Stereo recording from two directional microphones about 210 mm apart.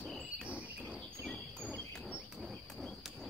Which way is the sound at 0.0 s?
Centre (ahead or behind).